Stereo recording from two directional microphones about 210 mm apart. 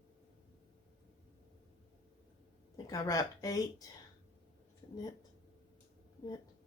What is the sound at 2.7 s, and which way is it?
A woman's voice, 15° left (ahead or behind).